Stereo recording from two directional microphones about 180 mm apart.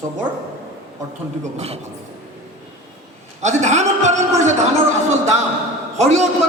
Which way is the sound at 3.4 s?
40° right (ahead or behind).